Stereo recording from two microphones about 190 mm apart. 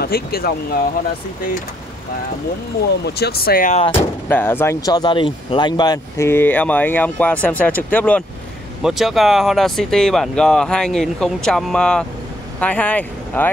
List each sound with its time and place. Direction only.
0.0 s speech: 55° left (ahead or behind)
3.1 s speech: 55° left (ahead or behind)
4.3 s speech: 10° left (ahead or behind)